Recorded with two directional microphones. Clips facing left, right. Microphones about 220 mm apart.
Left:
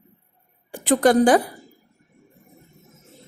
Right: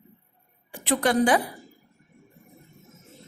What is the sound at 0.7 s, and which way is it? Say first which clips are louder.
Speech: left 6 dB; 45° left (ahead or behind).